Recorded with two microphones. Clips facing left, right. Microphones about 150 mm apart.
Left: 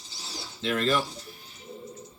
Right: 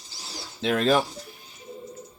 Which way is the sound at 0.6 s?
70° right (ahead or behind).